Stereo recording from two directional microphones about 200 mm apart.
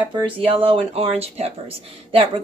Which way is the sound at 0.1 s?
30° right (ahead or behind).